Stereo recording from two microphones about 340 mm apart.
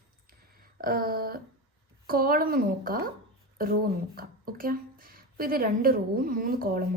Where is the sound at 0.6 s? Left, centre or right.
Right.